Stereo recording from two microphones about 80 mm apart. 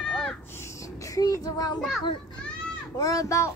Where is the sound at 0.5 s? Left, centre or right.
Left.